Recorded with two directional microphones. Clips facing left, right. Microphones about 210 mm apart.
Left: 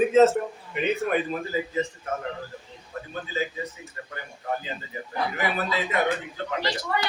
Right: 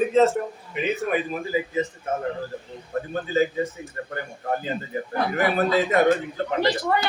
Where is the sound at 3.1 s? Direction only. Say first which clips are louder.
Right 8 dB; 50° right (ahead or behind).